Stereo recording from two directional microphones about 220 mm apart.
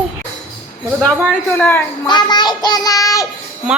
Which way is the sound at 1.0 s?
5° left (ahead or behind).